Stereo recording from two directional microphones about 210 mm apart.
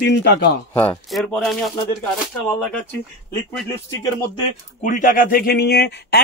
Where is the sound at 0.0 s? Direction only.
50° left (ahead or behind).